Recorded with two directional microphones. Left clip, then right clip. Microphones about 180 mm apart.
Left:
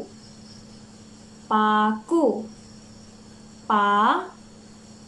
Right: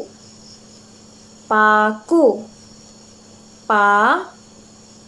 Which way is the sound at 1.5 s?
15° left (ahead or behind).